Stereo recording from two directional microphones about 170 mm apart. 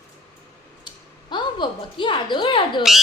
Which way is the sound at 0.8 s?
25° left (ahead or behind).